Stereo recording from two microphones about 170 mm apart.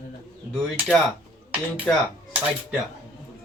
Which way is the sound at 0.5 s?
5° left (ahead or behind).